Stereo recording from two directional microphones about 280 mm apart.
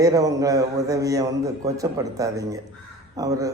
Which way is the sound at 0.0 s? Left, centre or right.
Centre.